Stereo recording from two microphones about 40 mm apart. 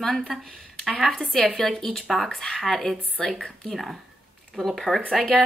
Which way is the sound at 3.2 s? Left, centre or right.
Centre.